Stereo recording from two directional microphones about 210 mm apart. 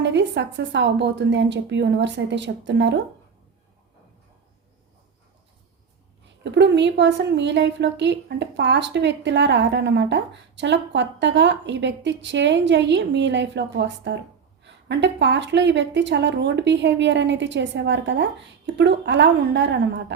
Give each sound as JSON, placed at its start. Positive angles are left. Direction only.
{"t": 0.0, "sound": "a woman's voice", "side_deg": -55}
{"t": 6.4, "sound": "a woman's voice", "side_deg": -55}